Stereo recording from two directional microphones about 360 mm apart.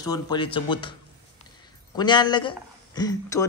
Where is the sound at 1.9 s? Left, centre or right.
Centre.